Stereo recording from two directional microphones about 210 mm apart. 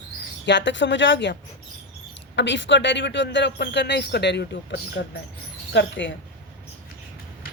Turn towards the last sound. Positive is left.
turn(degrees=55)  # may be behind; listen again after turning